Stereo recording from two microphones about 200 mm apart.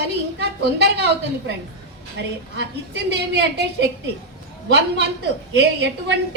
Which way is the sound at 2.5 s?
60° right (ahead or behind).